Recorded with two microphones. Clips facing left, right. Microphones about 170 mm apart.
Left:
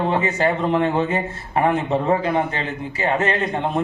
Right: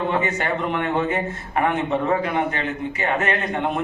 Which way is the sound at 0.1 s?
30° left (ahead or behind).